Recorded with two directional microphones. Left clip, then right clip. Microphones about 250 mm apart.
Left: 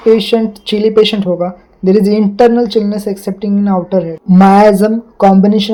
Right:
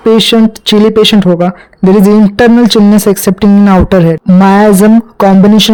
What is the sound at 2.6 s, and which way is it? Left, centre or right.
Speech, right.